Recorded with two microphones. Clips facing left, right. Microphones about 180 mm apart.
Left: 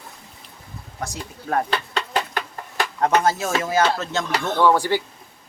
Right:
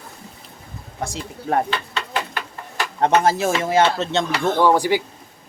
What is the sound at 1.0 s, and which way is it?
Speech, 25° right (ahead or behind).